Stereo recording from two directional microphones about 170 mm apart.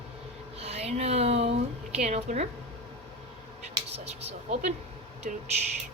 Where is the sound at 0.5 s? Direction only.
35° right (ahead or behind).